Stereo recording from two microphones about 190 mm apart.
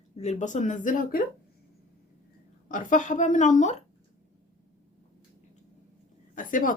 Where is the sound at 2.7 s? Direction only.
40° left (ahead or behind).